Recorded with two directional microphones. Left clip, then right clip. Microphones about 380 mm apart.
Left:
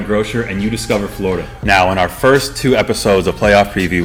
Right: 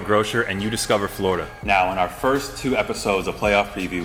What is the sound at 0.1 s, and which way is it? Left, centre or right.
Speech, right.